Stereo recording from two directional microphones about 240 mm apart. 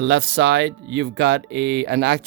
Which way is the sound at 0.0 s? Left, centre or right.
Right.